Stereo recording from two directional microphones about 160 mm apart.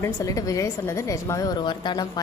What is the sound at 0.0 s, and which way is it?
A woman's voice, 20° left (ahead or behind).